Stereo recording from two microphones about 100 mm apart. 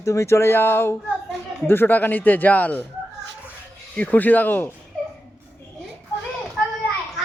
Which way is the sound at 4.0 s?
15° left (ahead or behind).